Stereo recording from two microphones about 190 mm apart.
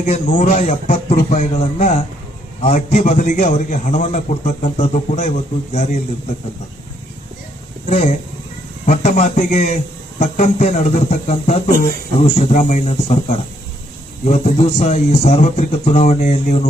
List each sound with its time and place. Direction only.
0.0 s a man's voice: 40° left (ahead or behind)
7.9 s a man's voice: 35° left (ahead or behind)